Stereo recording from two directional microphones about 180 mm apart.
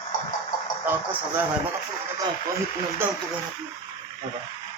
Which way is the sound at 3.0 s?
10° right (ahead or behind).